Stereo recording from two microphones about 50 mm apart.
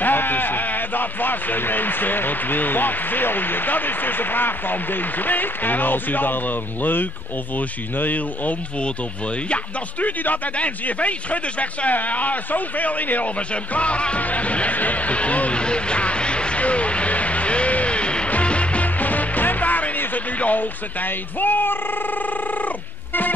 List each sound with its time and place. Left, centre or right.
0.0 s speech: left
13.7 s music: left